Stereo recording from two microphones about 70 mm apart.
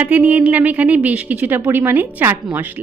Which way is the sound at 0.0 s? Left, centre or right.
Right.